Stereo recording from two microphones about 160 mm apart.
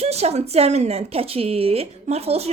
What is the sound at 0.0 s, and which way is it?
Speech, 40° right (ahead or behind).